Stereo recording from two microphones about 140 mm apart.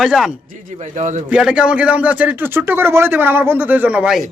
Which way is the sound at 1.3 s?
5° right (ahead or behind).